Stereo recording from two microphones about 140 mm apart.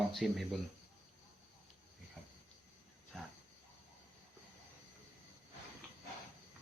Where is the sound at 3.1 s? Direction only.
5° left (ahead or behind).